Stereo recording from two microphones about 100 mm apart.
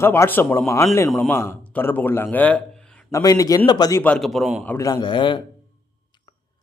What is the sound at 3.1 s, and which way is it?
Speech, 30° left (ahead or behind).